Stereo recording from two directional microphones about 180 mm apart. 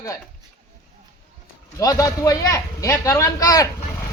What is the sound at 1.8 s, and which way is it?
A man's voice, 20° left (ahead or behind).